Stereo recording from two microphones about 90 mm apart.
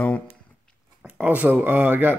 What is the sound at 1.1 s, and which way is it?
Speech, 20° right (ahead or behind).